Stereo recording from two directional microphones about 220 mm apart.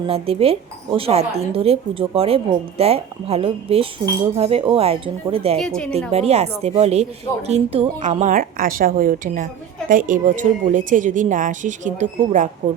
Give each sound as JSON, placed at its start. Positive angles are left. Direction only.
{"t": 0.1, "sound": "speech", "side_deg": -25}
{"t": 5.5, "sound": "a woman's voice", "side_deg": 5}
{"t": 6.1, "sound": "a woman's voice", "side_deg": -30}